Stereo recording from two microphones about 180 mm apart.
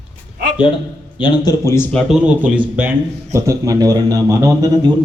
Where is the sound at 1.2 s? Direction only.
20° left (ahead or behind).